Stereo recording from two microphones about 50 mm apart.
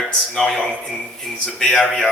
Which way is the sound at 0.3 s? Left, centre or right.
Centre.